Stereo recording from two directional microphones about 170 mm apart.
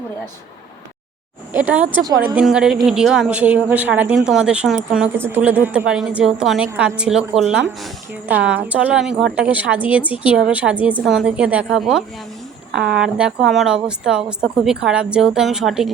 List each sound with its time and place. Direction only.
1.5 s a woman's voice: 10° right (ahead or behind)